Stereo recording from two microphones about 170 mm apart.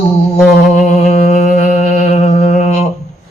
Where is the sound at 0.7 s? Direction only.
45° left (ahead or behind).